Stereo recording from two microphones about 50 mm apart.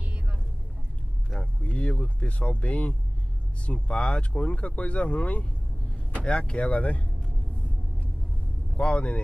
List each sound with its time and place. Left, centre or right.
1.4 s a sound: left
3.6 s speech: left
8.7 s speech: left